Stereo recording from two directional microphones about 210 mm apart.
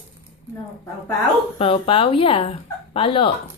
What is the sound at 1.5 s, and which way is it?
Speech, 25° left (ahead or behind).